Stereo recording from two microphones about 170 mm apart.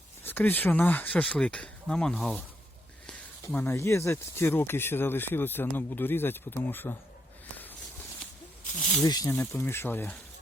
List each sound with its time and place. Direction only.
0.3 s speech: 10° left (ahead or behind)
8.8 s speech: centre (ahead or behind)
9.0 s speech: 20° left (ahead or behind)